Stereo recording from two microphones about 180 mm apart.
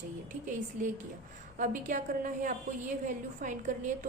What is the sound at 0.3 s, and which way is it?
A woman's voice, 45° right (ahead or behind).